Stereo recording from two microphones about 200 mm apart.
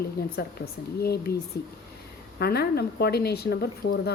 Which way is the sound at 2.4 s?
50° left (ahead or behind).